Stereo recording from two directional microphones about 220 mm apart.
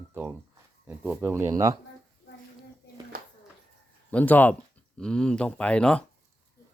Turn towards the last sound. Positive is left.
turn(degrees=5)  # may be behind; listen again after turning